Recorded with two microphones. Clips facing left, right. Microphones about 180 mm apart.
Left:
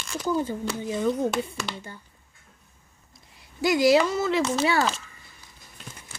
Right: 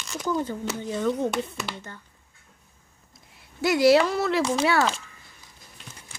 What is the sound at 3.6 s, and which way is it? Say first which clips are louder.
Speech: right 1 dB; centre (ahead or behind).